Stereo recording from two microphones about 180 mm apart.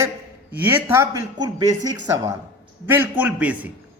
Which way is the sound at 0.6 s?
10° right (ahead or behind).